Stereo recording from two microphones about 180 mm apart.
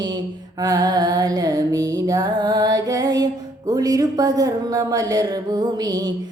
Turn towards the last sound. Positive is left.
turn(degrees=-20)  # may be behind; listen again after turning